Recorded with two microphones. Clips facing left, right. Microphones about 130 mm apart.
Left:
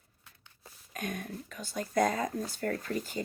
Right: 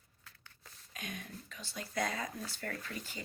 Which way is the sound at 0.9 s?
50° left (ahead or behind).